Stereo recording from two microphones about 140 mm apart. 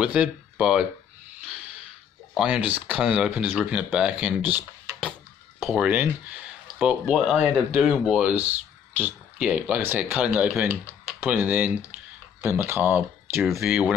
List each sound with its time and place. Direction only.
0.0 s speech: 10° right (ahead or behind)
2.3 s speech: 10° right (ahead or behind)
5.7 s speech: 10° right (ahead or behind)